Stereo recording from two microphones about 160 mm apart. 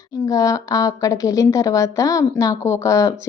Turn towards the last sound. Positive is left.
turn(degrees=20)  # may be behind; listen again after turning